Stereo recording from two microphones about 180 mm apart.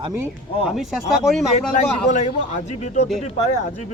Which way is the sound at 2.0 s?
40° left (ahead or behind).